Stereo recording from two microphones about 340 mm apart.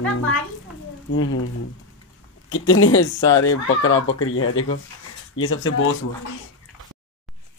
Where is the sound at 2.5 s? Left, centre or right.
Left.